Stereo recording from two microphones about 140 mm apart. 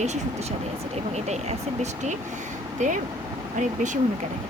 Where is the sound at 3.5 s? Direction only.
60° right (ahead or behind).